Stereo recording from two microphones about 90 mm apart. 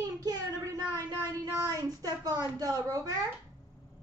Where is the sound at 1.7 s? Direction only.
45° right (ahead or behind).